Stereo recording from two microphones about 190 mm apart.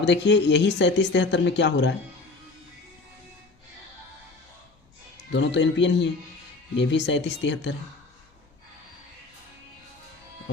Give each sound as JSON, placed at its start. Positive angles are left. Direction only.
{"t": 0.0, "sound": "speech", "side_deg": 70}
{"t": 5.3, "sound": "speech", "side_deg": 70}